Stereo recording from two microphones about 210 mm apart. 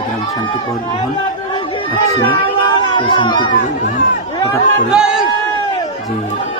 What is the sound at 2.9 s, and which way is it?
Speech, 25° left (ahead or behind).